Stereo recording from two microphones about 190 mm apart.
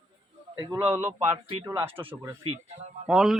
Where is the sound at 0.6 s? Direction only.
15° right (ahead or behind).